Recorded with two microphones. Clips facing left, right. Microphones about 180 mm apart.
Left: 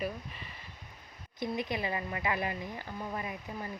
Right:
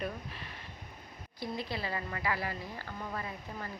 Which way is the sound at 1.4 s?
20° left (ahead or behind).